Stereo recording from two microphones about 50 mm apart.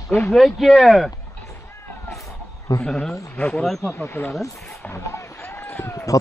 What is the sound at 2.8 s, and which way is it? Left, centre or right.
Speech, centre.